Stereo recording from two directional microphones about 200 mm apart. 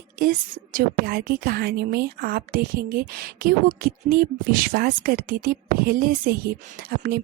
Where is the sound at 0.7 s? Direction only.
50° right (ahead or behind).